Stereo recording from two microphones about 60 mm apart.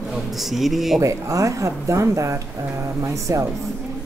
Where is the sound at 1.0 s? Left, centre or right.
Right.